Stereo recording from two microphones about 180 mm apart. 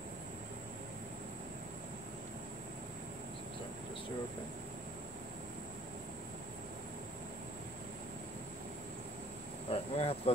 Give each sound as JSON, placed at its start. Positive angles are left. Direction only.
{"t": 9.7, "sound": "cricket", "side_deg": 35}